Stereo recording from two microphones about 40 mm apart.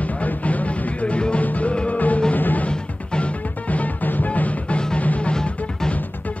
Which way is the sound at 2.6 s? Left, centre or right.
Left.